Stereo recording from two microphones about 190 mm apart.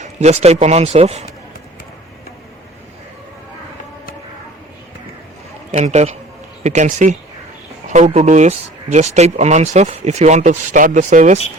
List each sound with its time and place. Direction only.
0.0 s speech: 35° right (ahead or behind)
5.7 s speech: 35° right (ahead or behind)